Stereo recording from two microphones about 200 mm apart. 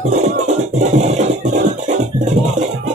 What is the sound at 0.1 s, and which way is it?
Music, 35° right (ahead or behind).